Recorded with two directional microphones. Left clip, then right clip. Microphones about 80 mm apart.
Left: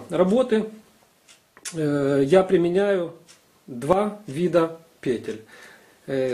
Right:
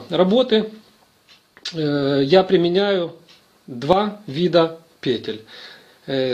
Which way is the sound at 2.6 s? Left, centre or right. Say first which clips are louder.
Right 3 dB; centre.